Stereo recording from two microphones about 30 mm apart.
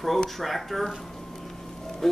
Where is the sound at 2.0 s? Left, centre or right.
Centre.